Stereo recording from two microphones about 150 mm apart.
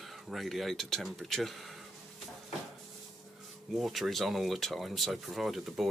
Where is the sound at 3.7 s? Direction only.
Centre (ahead or behind).